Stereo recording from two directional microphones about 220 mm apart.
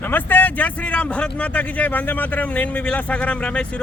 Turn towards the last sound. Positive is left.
turn(degrees=5)  # may be behind; listen again after turning